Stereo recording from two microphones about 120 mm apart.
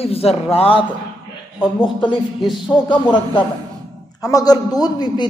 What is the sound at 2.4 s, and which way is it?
Speech, 5° right (ahead or behind).